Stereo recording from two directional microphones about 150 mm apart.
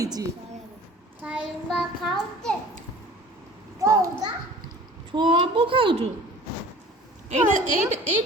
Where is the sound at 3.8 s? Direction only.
25° right (ahead or behind).